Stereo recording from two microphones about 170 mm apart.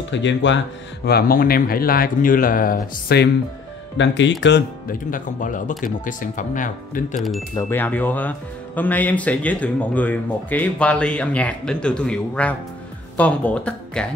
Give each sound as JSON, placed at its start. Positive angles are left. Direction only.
{"t": 0.1, "sound": "speech", "side_deg": 90}
{"t": 1.0, "sound": "speech", "side_deg": 65}
{"t": 4.0, "sound": "speech", "side_deg": 90}
{"t": 4.4, "sound": "speech", "side_deg": 75}
{"t": 7.2, "sound": "speech", "side_deg": 0}
{"t": 7.5, "sound": "speech", "side_deg": 10}